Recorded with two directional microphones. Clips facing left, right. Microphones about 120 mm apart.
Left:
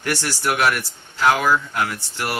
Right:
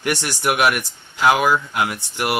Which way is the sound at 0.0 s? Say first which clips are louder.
Right 2 dB; 15° right (ahead or behind).